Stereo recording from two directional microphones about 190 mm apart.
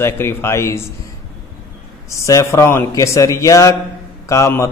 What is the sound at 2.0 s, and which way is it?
A man's voice, 15° left (ahead or behind).